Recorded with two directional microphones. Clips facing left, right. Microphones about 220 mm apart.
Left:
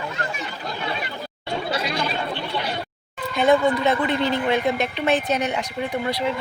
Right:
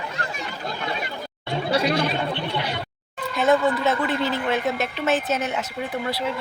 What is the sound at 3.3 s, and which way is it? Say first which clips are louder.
A woman's voice: left 2 dB; centre (ahead or behind).